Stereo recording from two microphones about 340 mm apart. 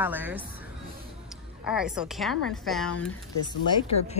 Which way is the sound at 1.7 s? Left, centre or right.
Centre.